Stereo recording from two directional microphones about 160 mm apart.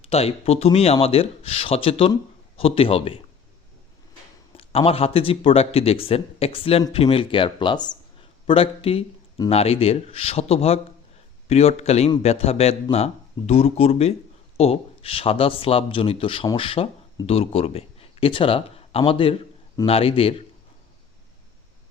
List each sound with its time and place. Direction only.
0.0 s speech: 40° left (ahead or behind)
4.5 s speech: 35° left (ahead or behind)